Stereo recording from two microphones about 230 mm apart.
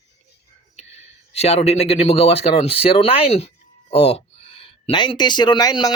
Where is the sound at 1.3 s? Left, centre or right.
Left.